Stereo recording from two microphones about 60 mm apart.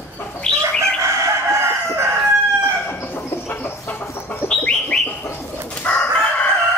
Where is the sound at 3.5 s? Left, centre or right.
Left.